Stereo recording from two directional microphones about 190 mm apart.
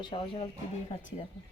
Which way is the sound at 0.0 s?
25° left (ahead or behind).